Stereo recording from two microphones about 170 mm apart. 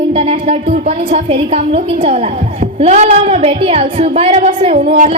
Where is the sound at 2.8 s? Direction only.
40° right (ahead or behind).